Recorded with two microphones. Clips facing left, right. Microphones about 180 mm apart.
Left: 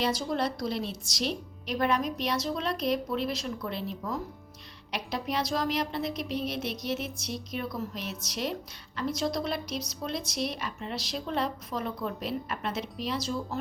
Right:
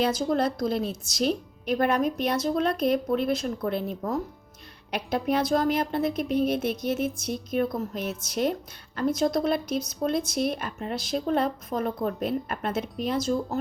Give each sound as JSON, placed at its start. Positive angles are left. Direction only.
{"t": 0.0, "sound": "speech", "side_deg": -50}